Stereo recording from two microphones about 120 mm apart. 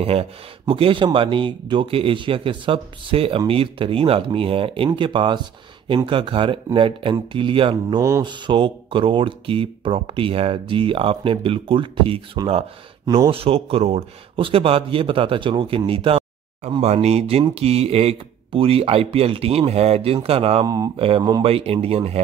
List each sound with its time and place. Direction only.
0.0 s speech: 55° right (ahead or behind)
13.3 s speech: 50° right (ahead or behind)
16.8 s speech: 65° right (ahead or behind)
20.6 s speech: 30° right (ahead or behind)
20.9 s speech: 50° right (ahead or behind)